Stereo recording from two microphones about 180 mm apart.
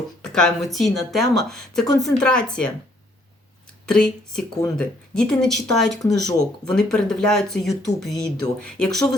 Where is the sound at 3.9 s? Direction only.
5° left (ahead or behind).